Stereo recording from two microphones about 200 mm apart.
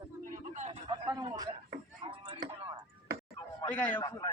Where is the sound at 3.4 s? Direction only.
10° left (ahead or behind).